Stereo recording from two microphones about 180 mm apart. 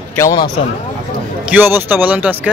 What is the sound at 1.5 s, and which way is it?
Speech, 10° right (ahead or behind).